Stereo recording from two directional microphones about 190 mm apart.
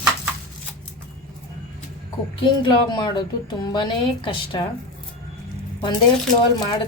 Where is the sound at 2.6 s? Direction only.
20° left (ahead or behind).